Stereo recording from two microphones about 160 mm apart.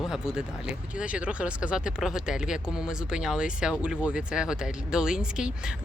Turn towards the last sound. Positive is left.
turn(degrees=-5)  # may be behind; listen again after turning